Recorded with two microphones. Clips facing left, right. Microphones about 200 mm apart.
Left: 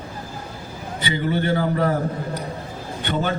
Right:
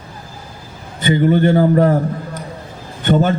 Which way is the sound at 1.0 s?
45° right (ahead or behind).